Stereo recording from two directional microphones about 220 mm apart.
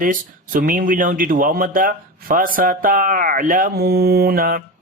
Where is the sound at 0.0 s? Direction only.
40° right (ahead or behind).